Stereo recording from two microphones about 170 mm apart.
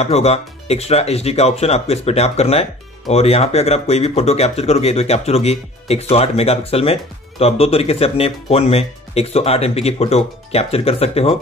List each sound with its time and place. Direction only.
0.0 s speech: 40° left (ahead or behind)